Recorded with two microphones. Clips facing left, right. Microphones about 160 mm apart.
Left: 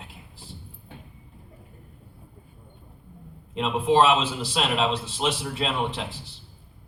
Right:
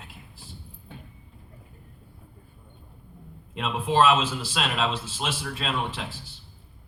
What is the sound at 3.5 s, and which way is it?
A man's voice, 20° left (ahead or behind).